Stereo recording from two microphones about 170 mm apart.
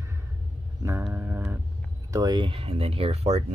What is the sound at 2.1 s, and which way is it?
Speech, 25° right (ahead or behind).